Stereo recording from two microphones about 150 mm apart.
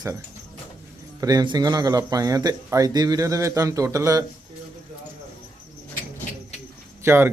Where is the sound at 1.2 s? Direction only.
25° right (ahead or behind).